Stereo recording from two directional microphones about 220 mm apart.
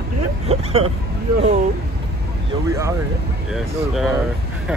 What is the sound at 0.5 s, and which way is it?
Vehicle, 25° right (ahead or behind).